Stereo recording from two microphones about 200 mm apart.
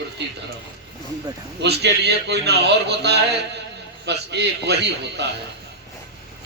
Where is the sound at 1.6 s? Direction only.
55° right (ahead or behind).